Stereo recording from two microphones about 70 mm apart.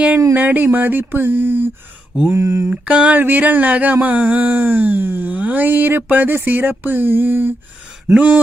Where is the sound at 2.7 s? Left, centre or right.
Centre.